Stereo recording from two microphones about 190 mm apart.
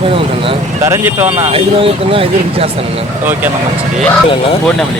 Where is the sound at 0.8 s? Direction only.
10° right (ahead or behind).